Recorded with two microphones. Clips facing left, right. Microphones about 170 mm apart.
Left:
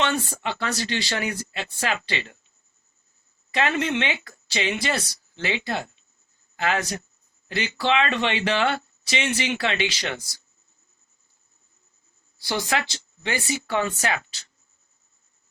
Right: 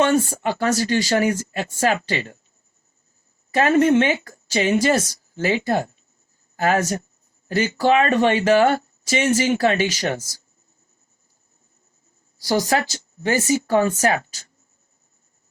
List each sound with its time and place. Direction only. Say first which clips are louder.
0.0 s a sound: right 7 dB; 40° right (ahead or behind)
0.4 s speech: right 7 dB; 40° right (ahead or behind)
3.5 s a woman's voice: right 9 dB; 40° right (ahead or behind)
12.4 s speech: right 6 dB; 40° right (ahead or behind)